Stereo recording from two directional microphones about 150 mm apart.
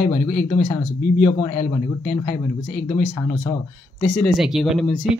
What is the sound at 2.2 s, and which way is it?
Speech, 50° left (ahead or behind).